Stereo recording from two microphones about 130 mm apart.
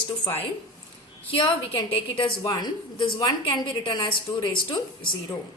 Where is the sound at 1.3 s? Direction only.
45° left (ahead or behind).